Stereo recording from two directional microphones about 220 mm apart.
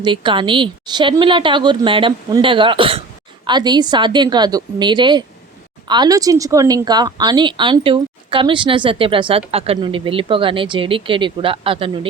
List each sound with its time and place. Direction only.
0.0 s speech: 20° right (ahead or behind)